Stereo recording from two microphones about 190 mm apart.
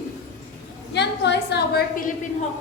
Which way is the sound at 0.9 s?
65° left (ahead or behind).